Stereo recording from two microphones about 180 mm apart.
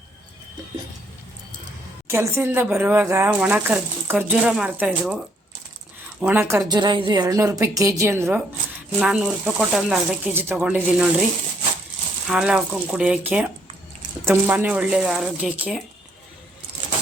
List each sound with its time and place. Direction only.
2.0 s speech: 15° right (ahead or behind)
12.3 s speech: 5° right (ahead or behind)